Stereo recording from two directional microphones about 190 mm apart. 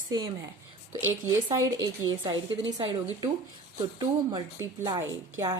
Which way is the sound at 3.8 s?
20° right (ahead or behind).